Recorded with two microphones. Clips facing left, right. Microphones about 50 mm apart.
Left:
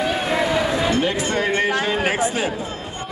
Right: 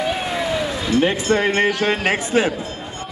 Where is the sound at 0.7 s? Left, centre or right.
Left.